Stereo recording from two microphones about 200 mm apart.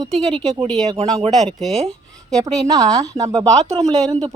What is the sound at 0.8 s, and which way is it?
Speech, 30° right (ahead or behind).